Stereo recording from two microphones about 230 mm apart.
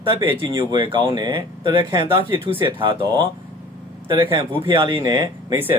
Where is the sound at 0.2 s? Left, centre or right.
Centre.